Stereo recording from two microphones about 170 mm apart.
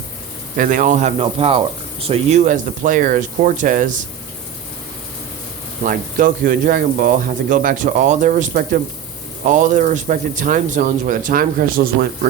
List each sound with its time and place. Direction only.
0.5 s speech: 55° right (ahead or behind)
1.2 s speech: 35° right (ahead or behind); by 3.9 s 50° right (ahead or behind)
5.8 s speech: 50° right (ahead or behind)